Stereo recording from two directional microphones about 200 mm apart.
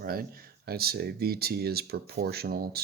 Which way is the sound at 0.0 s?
50° right (ahead or behind).